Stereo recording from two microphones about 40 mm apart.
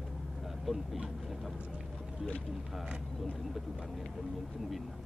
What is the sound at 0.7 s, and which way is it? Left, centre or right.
Speech, centre.